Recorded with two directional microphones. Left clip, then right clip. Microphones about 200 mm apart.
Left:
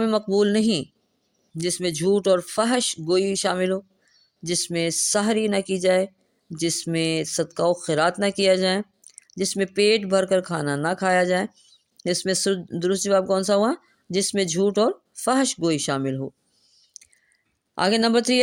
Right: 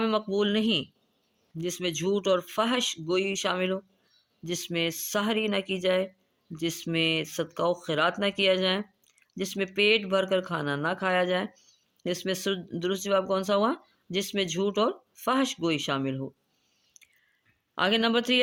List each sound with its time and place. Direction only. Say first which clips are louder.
0.0 s speech: left 6 dB; 40° left (ahead or behind)
16.9 s a sound: left 9 dB; 40° left (ahead or behind)
17.7 s speech: left 5 dB; 40° left (ahead or behind)